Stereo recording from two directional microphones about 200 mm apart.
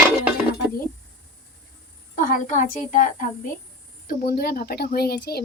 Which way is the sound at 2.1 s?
40° left (ahead or behind).